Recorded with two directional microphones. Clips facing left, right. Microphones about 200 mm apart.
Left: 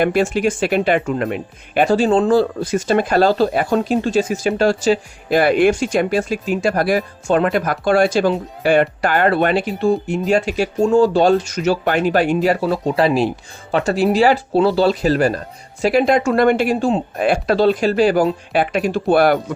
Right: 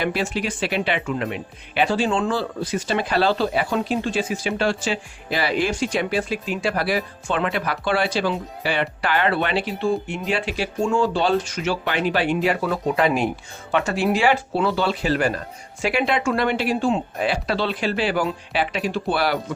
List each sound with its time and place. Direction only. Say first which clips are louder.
0.0 s speech: left 8 dB; 50° left (ahead or behind)